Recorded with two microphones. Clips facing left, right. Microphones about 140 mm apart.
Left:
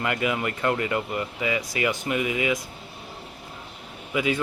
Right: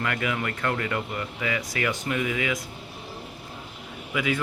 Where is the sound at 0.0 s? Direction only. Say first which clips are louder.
Left 2 dB; 20° left (ahead or behind).